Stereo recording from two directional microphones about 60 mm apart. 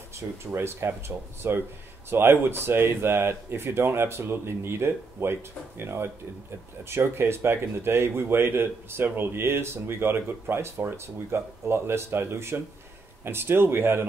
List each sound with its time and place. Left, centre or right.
0.5 s speech: right